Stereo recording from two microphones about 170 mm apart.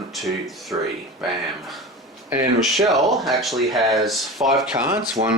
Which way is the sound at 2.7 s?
Centre (ahead or behind).